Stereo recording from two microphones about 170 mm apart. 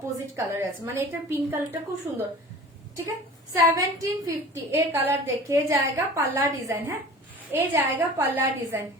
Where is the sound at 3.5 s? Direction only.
20° right (ahead or behind).